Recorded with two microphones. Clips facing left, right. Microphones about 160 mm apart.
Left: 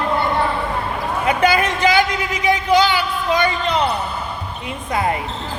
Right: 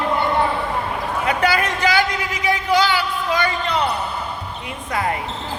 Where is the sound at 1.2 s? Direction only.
20° left (ahead or behind).